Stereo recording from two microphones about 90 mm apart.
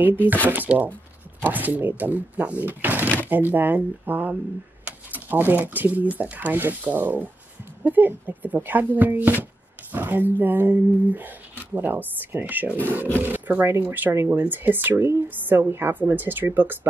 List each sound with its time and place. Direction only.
0.0 s a woman's voice: 20° right (ahead or behind)